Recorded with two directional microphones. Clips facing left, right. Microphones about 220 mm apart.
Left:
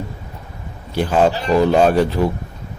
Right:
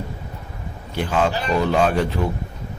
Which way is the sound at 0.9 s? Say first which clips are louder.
Left 5 dB; 35° left (ahead or behind).